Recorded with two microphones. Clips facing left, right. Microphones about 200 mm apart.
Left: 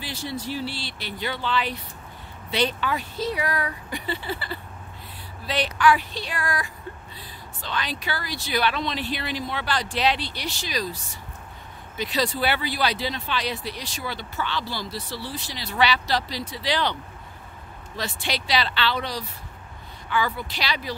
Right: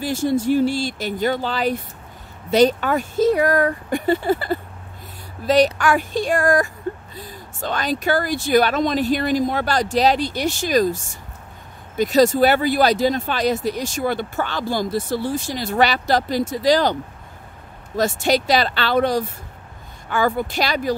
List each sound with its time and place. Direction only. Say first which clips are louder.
0.0 s speech: right 12 dB; 45° right (ahead or behind)